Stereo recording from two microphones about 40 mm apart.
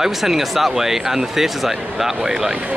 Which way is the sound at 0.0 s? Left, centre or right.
Centre.